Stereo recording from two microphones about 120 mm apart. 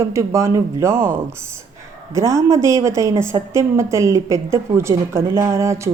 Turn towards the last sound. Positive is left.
turn(degrees=-25)  # may be behind; listen again after turning